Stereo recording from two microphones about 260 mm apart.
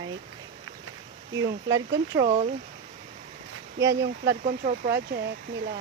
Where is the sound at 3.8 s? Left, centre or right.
Right.